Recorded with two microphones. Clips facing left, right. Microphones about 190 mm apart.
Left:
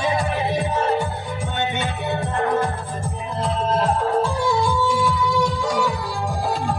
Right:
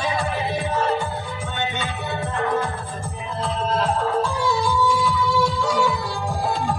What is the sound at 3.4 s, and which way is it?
Music, 20° left (ahead or behind).